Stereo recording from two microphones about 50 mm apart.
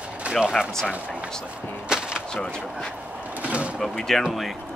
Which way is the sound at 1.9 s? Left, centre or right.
Centre.